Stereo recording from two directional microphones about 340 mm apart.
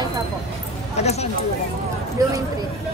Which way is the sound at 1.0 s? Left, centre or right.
Centre.